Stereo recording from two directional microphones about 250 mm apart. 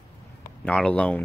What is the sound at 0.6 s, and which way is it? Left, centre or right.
Speech, centre.